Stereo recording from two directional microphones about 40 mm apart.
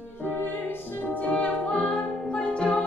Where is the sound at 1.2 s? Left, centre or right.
Left.